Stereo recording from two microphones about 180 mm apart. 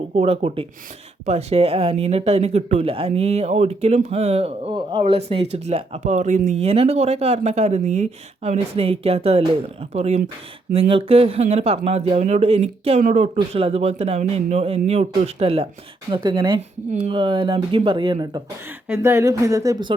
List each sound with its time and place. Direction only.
0.2 s speech: 35° right (ahead or behind)
18.9 s speech: 15° right (ahead or behind)